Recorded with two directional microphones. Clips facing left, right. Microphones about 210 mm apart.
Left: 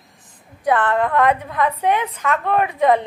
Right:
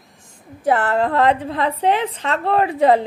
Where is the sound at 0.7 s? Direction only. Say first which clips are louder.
Even; 25° right (ahead or behind).